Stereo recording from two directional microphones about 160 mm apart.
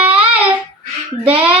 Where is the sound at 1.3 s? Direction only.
10° right (ahead or behind).